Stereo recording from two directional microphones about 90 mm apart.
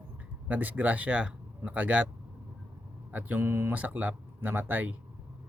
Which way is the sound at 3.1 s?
20° right (ahead or behind).